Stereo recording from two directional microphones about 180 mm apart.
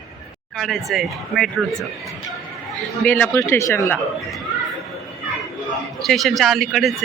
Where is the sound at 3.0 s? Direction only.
10° left (ahead or behind).